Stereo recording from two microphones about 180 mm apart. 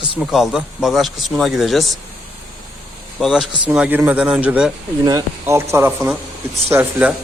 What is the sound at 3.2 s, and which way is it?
Speech, centre (ahead or behind).